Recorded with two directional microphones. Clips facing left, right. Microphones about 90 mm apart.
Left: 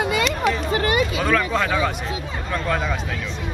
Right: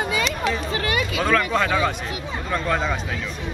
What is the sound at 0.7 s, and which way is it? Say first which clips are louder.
Speech: left 4 dB; 30° left (ahead or behind).